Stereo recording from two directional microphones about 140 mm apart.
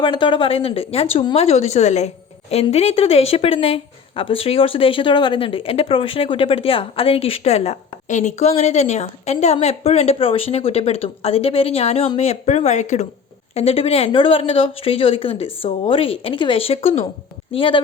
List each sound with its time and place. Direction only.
0.0 s speech: 35° left (ahead or behind); by 13.1 s 60° left (ahead or behind)
13.5 s speech: 45° left (ahead or behind)